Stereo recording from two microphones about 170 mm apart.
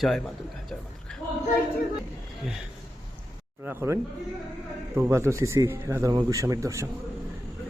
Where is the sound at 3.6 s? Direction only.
15° right (ahead or behind).